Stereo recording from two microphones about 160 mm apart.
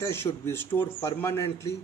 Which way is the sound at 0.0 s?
15° left (ahead or behind).